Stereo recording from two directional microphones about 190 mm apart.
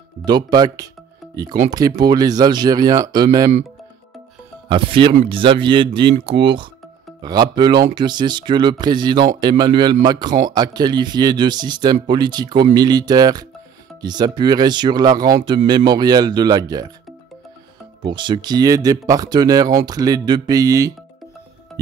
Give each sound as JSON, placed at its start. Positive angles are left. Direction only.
{"t": 0.2, "sound": "speech", "side_deg": -20}
{"t": 4.6, "sound": "speech", "side_deg": -25}
{"t": 18.0, "sound": "speech", "side_deg": -25}